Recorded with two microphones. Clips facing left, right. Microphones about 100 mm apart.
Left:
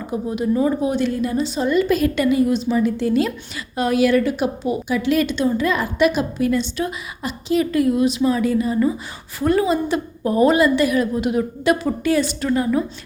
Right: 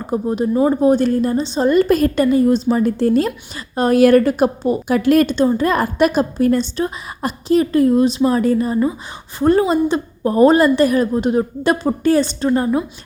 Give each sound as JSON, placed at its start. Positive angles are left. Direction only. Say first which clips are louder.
{"t": 0.0, "sound": "a woman's voice", "louder": "right 4 dB", "side_deg": -40}
{"t": 1.6, "sound": "a woman's voice", "louder": "right 5 dB", "side_deg": -45}